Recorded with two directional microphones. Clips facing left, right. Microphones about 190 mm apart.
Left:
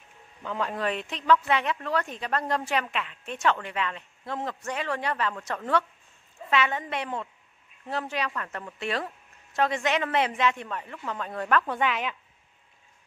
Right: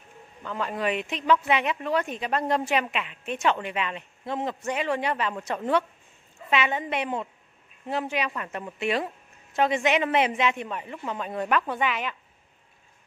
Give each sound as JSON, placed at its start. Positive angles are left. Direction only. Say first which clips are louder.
{"t": 0.4, "sound": "a woman's voice", "louder": "even", "side_deg": 0}